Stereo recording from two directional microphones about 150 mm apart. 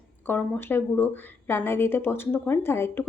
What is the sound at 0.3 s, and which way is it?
A woman's voice, 15° left (ahead or behind).